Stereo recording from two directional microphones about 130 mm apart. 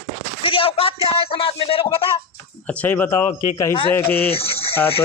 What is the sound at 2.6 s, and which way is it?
Speech, 10° left (ahead or behind).